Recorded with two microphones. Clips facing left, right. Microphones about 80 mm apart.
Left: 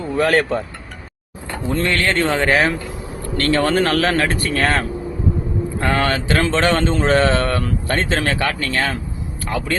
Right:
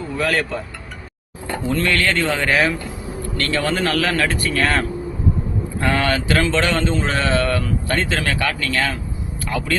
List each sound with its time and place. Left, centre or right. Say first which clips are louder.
0.2 s speech: left 5 dB; left
1.7 s speech: left 1 dB; left